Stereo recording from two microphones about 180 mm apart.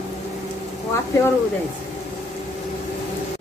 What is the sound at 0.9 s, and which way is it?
Speech, 15° left (ahead or behind).